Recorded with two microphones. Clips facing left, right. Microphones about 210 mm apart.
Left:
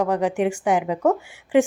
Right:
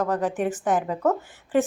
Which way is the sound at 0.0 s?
15° left (ahead or behind).